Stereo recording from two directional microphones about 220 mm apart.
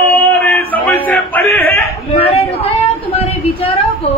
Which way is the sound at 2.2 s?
25° left (ahead or behind).